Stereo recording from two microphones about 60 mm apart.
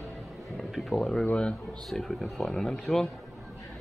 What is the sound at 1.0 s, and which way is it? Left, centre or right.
Speech, centre.